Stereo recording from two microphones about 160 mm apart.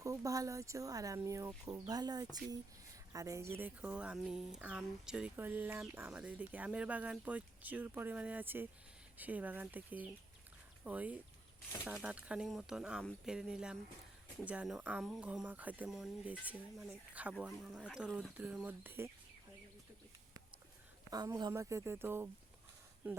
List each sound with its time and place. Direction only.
0.0 s speech: 20° right (ahead or behind)
21.1 s speech: 25° right (ahead or behind)